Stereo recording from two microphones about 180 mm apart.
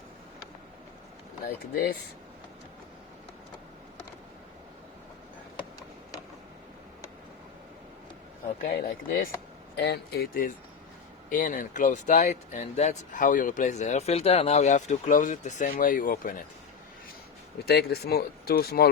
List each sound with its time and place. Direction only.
8.6 s speech: 55° left (ahead or behind)
17.7 s speech: 60° left (ahead or behind)